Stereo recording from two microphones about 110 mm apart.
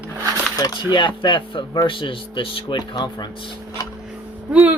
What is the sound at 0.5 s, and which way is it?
Speech, 40° left (ahead or behind).